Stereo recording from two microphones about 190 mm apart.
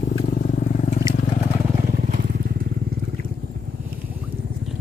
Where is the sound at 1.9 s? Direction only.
45° right (ahead or behind).